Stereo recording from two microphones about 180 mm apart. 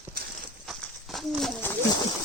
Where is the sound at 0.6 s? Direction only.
Centre (ahead or behind).